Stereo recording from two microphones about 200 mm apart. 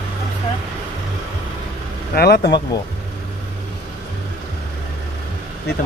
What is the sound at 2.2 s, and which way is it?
Speech, 55° left (ahead or behind).